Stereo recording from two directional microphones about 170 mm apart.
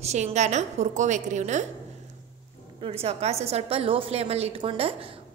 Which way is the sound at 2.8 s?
35° right (ahead or behind).